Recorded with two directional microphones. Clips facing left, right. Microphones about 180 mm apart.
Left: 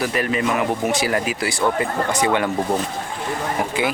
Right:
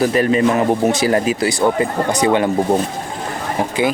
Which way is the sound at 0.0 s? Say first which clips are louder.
Right 7 dB; 30° right (ahead or behind).